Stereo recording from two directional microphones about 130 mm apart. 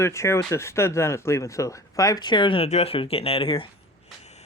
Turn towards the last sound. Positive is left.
turn(degrees=45)  # may be behind; listen again after turning